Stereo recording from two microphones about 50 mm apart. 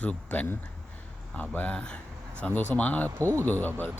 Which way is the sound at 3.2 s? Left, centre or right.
Right.